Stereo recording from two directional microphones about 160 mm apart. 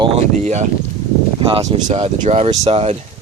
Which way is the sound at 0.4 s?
45° right (ahead or behind).